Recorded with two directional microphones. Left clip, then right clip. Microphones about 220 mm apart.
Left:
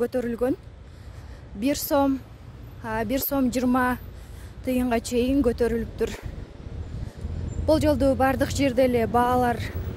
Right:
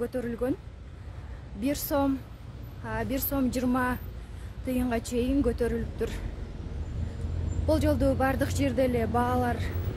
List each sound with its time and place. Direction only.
0.0 s speech: 40° left (ahead or behind)
1.6 s speech: 35° left (ahead or behind)
7.6 s speech: 35° left (ahead or behind)